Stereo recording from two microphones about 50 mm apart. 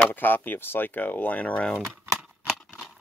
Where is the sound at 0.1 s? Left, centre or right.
Left.